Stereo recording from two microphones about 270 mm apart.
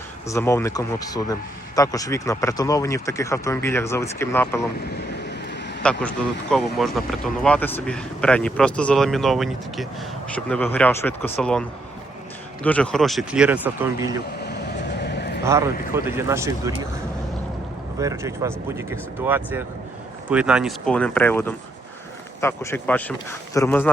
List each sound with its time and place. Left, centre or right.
0.3 s a man's voice: centre
5.8 s speech: centre
12.6 s speech: centre
14.4 s vehicle: left
15.4 s speech: centre
18.0 s a man's voice: centre